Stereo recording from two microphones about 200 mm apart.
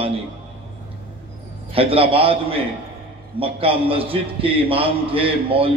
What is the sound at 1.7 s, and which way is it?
A man's voice, 30° right (ahead or behind).